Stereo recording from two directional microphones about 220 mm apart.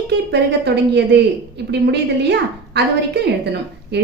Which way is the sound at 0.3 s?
50° right (ahead or behind).